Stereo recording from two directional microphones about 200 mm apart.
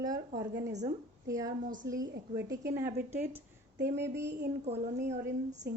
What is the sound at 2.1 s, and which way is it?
Speech, 55° right (ahead or behind).